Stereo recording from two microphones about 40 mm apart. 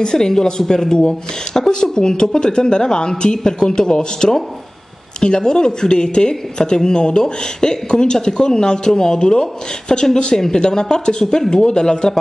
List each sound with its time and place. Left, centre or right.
0.0 s speech: centre